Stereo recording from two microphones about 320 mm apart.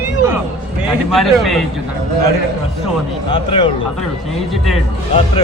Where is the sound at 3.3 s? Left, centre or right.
Centre.